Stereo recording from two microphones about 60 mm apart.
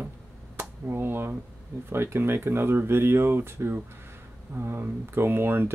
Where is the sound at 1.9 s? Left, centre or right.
Right.